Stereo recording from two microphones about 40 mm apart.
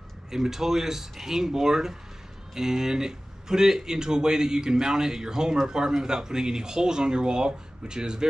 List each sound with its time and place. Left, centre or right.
0.3 s speech: centre